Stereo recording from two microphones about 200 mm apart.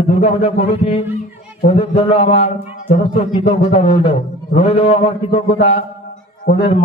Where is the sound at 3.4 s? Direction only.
30° left (ahead or behind).